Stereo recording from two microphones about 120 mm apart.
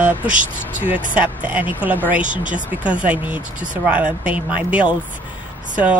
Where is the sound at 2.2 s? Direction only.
90° right.